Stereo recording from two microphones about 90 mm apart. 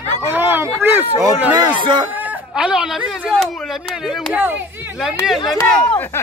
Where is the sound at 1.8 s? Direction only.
60° right (ahead or behind).